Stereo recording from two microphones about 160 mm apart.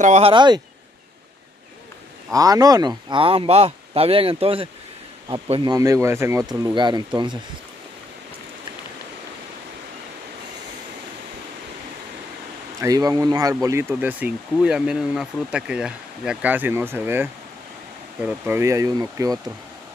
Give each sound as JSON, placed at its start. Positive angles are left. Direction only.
{"t": 0.0, "sound": "speech", "side_deg": -45}
{"t": 0.3, "sound": "speech", "side_deg": -30}
{"t": 2.3, "sound": "speech", "side_deg": -20}
{"t": 5.8, "sound": "speech", "side_deg": -20}
{"t": 12.8, "sound": "speech", "side_deg": -20}